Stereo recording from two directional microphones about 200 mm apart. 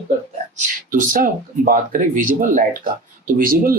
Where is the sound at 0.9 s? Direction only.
40° right (ahead or behind).